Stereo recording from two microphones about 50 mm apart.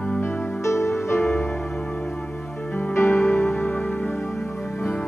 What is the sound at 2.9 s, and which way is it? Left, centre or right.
Music, left.